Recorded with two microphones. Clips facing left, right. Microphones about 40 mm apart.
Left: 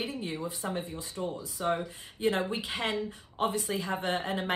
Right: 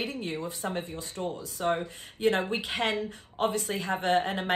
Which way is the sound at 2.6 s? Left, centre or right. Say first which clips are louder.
Right 3 dB; right.